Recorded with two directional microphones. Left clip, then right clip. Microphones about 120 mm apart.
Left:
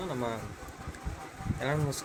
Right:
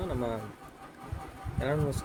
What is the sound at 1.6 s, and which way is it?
Speech, 15° right (ahead or behind).